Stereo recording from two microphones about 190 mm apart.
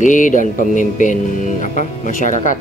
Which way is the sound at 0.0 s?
40° left (ahead or behind).